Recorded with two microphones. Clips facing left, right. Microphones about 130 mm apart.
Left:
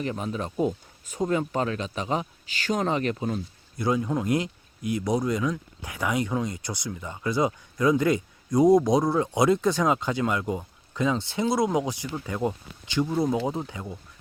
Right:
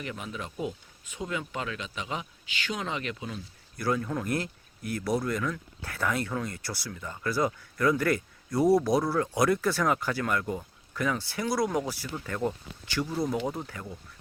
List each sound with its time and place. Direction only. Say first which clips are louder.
0.0 s speech: left 7 dB; 35° left (ahead or behind)
3.8 s speech: left 4 dB; 20° left (ahead or behind)